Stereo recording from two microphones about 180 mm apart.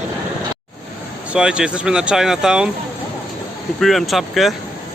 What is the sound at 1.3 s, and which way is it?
Speech, 5° right (ahead or behind).